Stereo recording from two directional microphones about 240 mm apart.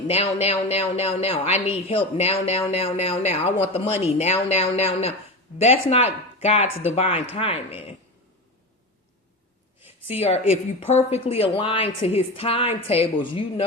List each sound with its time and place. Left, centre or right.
0.1 s a woman's voice: left
9.8 s a woman's voice: left